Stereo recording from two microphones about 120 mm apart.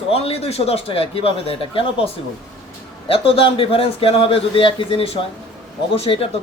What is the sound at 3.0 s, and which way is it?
Speech, 50° left (ahead or behind).